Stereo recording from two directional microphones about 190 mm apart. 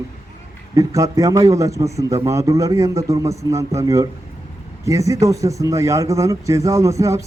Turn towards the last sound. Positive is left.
turn(degrees=-15)  # may be behind; listen again after turning